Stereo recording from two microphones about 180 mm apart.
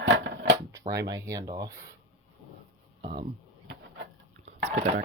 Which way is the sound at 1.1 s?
20° right (ahead or behind).